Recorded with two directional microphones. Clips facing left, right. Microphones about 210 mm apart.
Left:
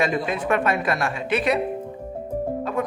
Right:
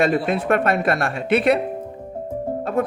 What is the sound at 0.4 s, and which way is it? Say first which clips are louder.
Speech: right 3 dB; 55° right (ahead or behind).